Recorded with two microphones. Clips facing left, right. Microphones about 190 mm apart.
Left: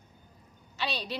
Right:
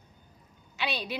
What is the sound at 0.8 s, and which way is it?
Speech, 15° right (ahead or behind).